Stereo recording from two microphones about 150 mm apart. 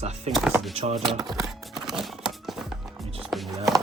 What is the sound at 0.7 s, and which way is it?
Speech, 45° right (ahead or behind).